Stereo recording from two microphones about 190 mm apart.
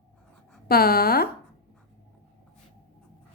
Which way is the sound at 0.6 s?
55° left (ahead or behind).